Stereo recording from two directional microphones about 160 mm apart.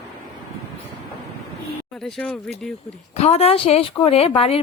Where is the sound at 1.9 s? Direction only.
5° left (ahead or behind).